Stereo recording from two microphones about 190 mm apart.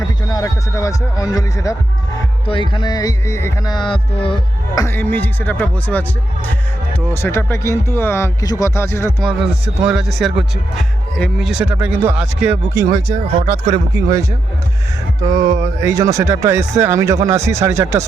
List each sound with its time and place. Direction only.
0.3 s speech: 20° left (ahead or behind)
9.8 s speech: 5° right (ahead or behind); by 14.3 s 20° right (ahead or behind)
15.4 s a sound: 40° right (ahead or behind)
15.8 s speech: 15° right (ahead or behind)